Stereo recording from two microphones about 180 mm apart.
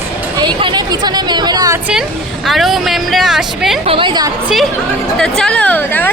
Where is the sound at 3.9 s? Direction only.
25° right (ahead or behind).